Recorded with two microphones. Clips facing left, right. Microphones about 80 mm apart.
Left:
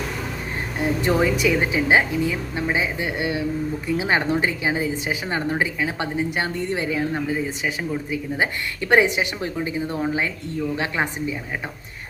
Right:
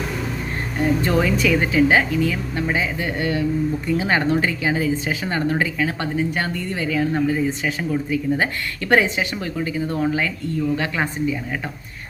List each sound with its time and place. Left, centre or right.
1.0 s speech: centre
7.1 s speech: centre